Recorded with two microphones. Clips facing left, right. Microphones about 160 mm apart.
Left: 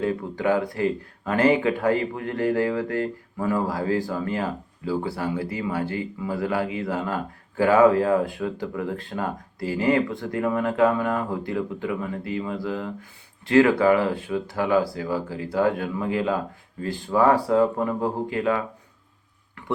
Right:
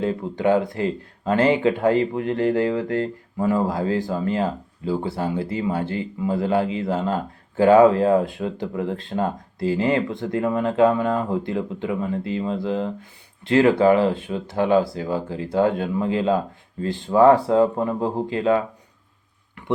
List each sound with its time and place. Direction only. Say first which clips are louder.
0.0 s speech: right 2 dB; 25° right (ahead or behind)